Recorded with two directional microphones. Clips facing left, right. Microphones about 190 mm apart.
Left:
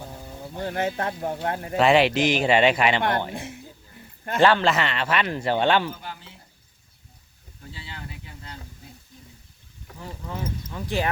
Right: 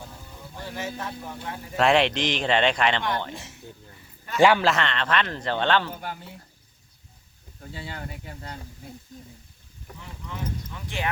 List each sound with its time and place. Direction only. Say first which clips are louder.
0.6 s speech: left 7 dB; 60° left (ahead or behind)
1.7 s speech: left 2 dB; centre (ahead or behind)
3.3 s a sound: left 5 dB; 55° left (ahead or behind)
4.4 s speech: even; 10° right (ahead or behind)
4.7 s speech: left 1 dB; 5° left (ahead or behind)
6.0 s speech: right 3 dB; 50° right (ahead or behind)
7.7 s speech: right 4 dB; 50° right (ahead or behind)
10.0 s speech: left 3 dB; 35° left (ahead or behind)